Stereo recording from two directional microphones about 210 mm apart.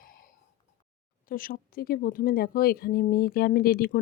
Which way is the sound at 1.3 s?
40° left (ahead or behind).